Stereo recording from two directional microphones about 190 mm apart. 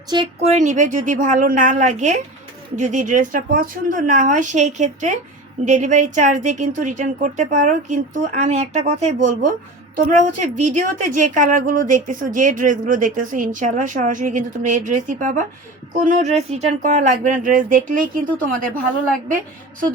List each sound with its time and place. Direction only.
0.1 s speech: 25° right (ahead or behind)
0.5 s a woman's voice: 40° right (ahead or behind)